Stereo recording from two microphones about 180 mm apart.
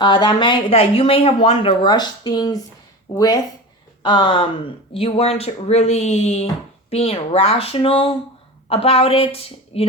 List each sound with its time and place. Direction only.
0.0 s speech: 25° left (ahead or behind)